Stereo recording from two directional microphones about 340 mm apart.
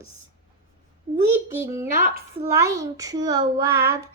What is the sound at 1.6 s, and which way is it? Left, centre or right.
A woman's voice, centre.